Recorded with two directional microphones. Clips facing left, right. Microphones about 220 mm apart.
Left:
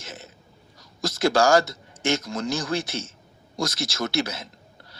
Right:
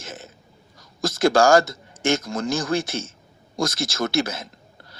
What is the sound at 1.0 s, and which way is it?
A man's voice, 50° right (ahead or behind).